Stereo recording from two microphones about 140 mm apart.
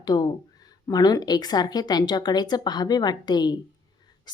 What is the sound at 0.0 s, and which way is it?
A woman's voice, 30° left (ahead or behind).